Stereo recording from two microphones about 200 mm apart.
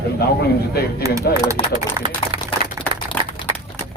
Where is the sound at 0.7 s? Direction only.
50° left (ahead or behind).